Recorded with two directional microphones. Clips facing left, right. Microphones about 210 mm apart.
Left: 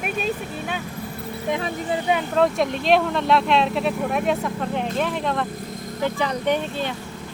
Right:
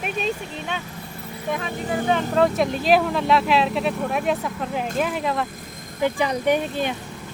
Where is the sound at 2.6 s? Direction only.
Centre (ahead or behind).